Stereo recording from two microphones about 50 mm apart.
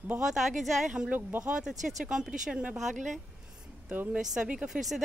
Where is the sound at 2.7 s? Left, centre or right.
Centre.